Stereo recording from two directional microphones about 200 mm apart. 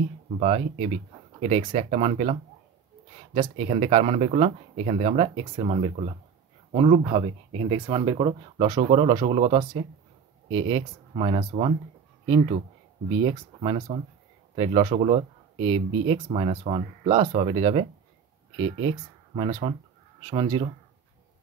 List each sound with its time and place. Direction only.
0.4 s speech: 30° right (ahead or behind)
3.3 s speech: 25° right (ahead or behind)
13.1 s speech: 25° right (ahead or behind)